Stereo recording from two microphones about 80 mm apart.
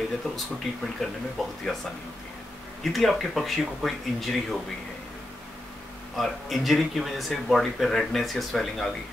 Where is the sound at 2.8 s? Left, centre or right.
Centre.